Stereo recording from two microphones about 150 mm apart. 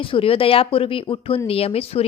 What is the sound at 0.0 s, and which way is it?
A woman's voice, 35° left (ahead or behind).